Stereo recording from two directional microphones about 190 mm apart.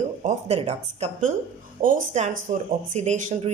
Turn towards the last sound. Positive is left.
turn(degrees=-40)  # may be behind; listen again after turning